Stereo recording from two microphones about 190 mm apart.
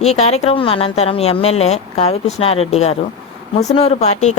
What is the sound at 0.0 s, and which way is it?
A woman's voice, 35° left (ahead or behind).